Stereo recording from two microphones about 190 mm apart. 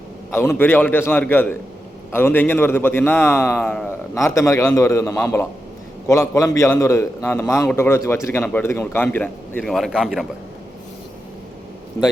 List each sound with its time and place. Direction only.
0.3 s a man's voice: 10° left (ahead or behind)
3.6 s speech: centre (ahead or behind)
4.1 s a man's voice: 15° left (ahead or behind); by 10.2 s 5° right (ahead or behind)